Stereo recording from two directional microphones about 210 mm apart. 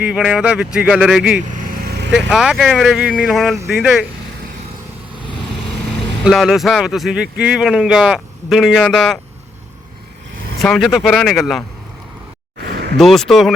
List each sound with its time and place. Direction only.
0.0 s speech: 5° right (ahead or behind)
1.5 s vehicle: 40° right (ahead or behind)
2.1 s speech: 5° right (ahead or behind)
6.2 s speech: centre (ahead or behind)
10.6 s speech: centre (ahead or behind)
13.0 s speech: centre (ahead or behind)